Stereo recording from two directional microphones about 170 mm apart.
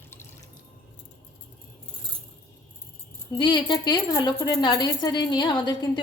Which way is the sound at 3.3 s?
25° left (ahead or behind).